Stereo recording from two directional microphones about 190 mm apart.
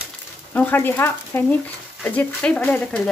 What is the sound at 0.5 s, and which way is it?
Speech, 10° left (ahead or behind).